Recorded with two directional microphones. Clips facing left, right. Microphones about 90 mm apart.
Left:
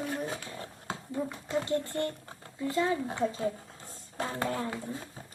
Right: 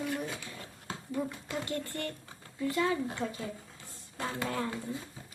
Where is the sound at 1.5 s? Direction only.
25° left (ahead or behind).